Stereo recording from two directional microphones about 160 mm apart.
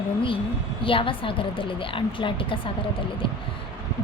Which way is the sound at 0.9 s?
35° left (ahead or behind).